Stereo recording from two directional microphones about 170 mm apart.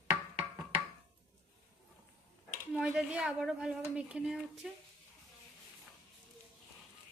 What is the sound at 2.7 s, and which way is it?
A woman's voice, 5° right (ahead or behind).